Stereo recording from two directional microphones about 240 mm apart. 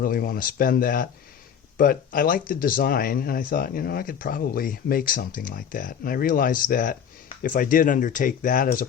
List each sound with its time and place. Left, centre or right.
0.0 s speech: left